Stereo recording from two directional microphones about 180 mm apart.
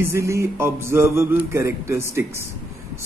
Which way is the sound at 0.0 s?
15° right (ahead or behind).